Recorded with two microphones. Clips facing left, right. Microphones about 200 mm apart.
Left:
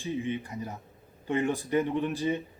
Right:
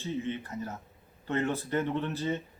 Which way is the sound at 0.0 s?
15° left (ahead or behind).